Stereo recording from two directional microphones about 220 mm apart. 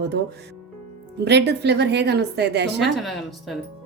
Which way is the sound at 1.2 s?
50° right (ahead or behind).